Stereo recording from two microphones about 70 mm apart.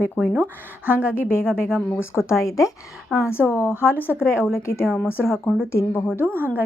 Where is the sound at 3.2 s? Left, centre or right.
Left.